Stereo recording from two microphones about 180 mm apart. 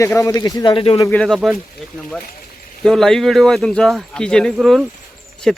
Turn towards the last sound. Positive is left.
turn(degrees=0)  # may be behind; listen again after turning